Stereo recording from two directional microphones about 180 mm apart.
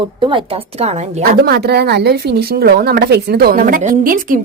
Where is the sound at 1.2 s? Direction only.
60° right (ahead or behind).